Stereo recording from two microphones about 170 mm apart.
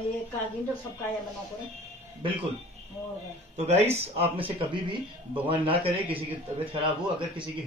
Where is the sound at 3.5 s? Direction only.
40° right (ahead or behind).